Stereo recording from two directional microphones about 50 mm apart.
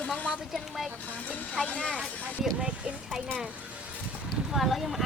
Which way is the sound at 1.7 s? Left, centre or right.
Left.